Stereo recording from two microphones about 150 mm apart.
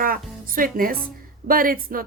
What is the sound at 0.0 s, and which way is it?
Music, 70° right (ahead or behind).